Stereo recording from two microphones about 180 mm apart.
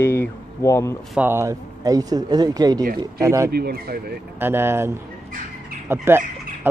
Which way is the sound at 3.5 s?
60° right (ahead or behind).